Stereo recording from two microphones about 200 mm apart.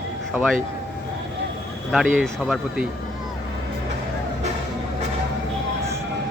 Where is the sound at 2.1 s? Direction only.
Centre (ahead or behind).